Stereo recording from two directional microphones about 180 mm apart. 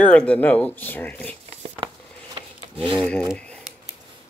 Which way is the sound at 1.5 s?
35° right (ahead or behind).